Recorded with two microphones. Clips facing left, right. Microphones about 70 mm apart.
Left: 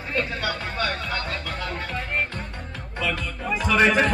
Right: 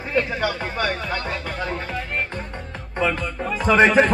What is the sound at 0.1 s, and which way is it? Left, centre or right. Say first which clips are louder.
Speech: right 4 dB; centre.